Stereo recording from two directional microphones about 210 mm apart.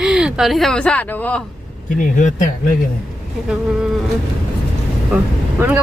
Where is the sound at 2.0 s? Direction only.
35° left (ahead or behind).